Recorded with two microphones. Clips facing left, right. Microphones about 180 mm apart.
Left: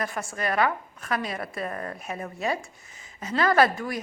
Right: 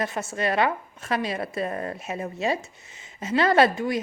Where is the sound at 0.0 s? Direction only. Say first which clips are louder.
Right 3 dB; 25° right (ahead or behind).